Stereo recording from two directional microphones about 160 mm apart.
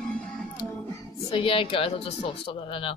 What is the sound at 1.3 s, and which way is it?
A woman's voice, 30° left (ahead or behind).